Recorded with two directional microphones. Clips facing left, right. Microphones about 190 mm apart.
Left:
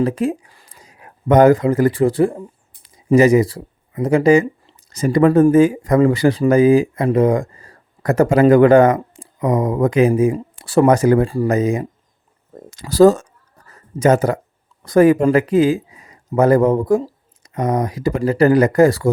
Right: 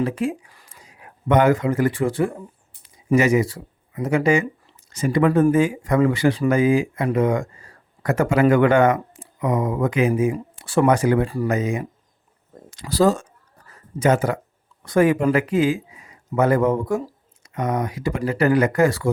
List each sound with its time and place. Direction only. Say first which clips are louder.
0.0 s speech: left 4 dB; 40° left (ahead or behind)
12.9 s speech: left 7 dB; 45° left (ahead or behind)